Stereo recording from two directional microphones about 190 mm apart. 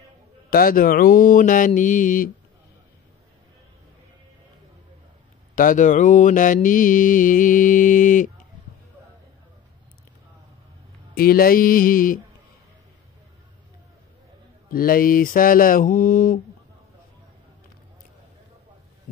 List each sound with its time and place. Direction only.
0.5 s mantra: 50° left (ahead or behind)
5.6 s mantra: 45° left (ahead or behind)
11.1 s mantra: 50° left (ahead or behind)
14.7 s mantra: 50° left (ahead or behind)